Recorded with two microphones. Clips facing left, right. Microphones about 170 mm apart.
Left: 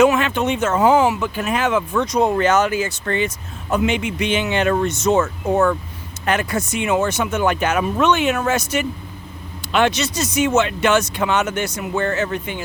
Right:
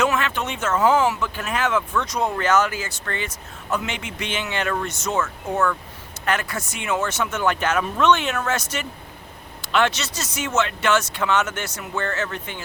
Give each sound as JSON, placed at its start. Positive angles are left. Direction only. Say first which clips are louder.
{"t": 0.0, "sound": "speech", "louder": "left 7 dB", "side_deg": 15}
{"t": 5.2, "sound": "speech", "louder": "left 6 dB", "side_deg": 35}
{"t": 6.2, "sound": "speech", "louder": "left 4 dB", "side_deg": 20}